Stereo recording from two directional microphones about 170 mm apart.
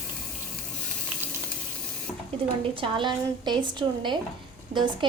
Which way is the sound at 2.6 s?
30° right (ahead or behind).